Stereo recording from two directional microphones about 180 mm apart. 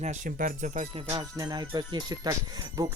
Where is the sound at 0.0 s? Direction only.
45° right (ahead or behind).